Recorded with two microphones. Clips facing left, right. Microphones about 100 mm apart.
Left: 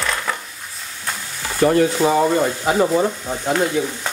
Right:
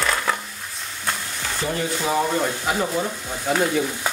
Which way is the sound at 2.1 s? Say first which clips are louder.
Left 5 dB; centre (ahead or behind).